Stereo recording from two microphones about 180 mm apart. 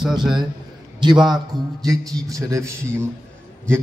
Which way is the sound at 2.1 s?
20° right (ahead or behind).